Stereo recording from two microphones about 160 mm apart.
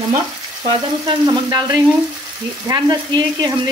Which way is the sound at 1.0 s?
25° right (ahead or behind).